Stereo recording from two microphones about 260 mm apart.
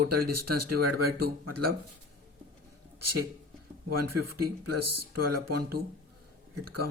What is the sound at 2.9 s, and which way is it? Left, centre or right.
Speech, right.